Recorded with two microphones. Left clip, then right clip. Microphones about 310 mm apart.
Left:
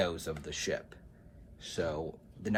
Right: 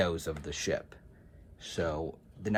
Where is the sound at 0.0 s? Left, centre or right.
Right.